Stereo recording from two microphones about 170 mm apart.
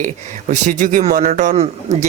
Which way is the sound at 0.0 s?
50° right (ahead or behind).